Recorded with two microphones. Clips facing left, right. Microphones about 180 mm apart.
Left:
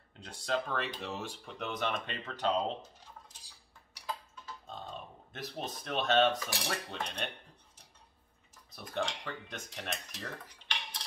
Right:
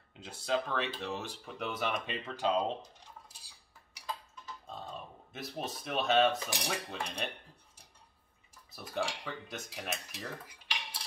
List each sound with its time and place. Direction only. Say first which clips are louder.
0.1 s speech: right 1 dB; 5° right (ahead or behind)
3.3 s dishes: even; 10° right (ahead or behind)
4.6 s speech: right 1 dB; 5° right (ahead or behind)
8.7 s speech: even; 5° right (ahead or behind)